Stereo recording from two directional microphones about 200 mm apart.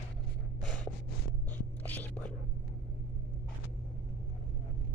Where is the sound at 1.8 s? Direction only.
10° left (ahead or behind).